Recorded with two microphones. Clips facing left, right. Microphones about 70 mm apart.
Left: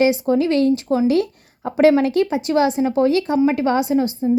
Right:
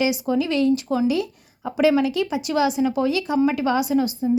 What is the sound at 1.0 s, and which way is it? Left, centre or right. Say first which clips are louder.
A woman's voice: left 4 dB; left.